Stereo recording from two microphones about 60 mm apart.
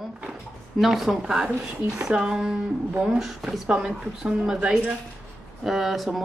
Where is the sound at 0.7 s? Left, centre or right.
Centre.